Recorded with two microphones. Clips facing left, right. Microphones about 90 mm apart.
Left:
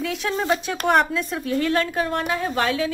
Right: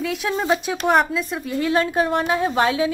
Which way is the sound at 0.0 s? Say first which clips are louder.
Right 1 dB; centre (ahead or behind).